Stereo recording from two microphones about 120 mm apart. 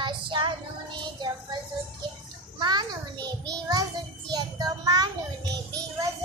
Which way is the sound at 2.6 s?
35° right (ahead or behind).